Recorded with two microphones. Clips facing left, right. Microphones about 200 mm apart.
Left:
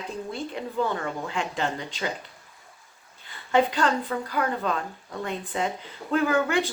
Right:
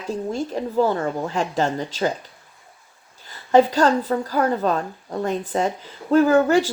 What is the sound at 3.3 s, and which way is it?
Speech, 40° right (ahead or behind).